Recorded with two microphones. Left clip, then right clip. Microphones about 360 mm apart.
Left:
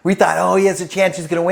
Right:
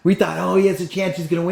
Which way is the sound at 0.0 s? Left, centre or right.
Left.